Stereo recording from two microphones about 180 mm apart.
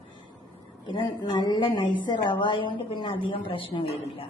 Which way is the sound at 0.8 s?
25° left (ahead or behind).